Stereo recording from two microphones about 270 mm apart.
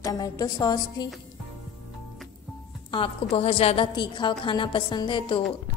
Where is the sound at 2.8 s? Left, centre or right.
Centre.